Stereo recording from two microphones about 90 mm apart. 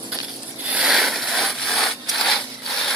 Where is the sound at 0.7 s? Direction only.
10° right (ahead or behind).